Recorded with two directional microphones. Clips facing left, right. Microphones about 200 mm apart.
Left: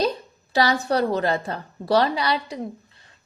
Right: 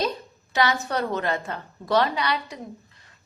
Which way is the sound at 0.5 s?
35° left (ahead or behind).